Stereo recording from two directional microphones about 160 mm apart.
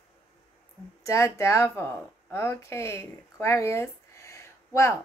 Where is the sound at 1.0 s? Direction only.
20° left (ahead or behind).